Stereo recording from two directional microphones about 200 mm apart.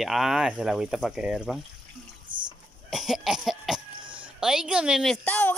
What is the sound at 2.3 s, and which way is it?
Rowboat, 25° right (ahead or behind).